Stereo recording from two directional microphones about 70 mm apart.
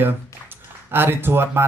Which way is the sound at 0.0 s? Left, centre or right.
Right.